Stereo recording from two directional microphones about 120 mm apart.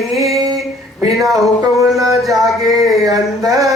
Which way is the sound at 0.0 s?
Centre (ahead or behind).